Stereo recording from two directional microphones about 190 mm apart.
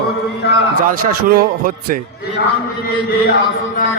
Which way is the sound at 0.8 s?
50° right (ahead or behind).